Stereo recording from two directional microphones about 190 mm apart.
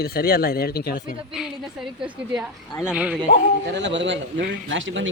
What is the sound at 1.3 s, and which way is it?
A woman's voice, centre (ahead or behind).